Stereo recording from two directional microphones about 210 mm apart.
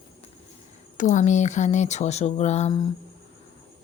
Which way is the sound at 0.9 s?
35° left (ahead or behind).